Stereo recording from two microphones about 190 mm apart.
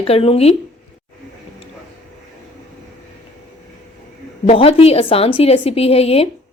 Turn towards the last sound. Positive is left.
turn(degrees=30)  # may be behind; listen again after turning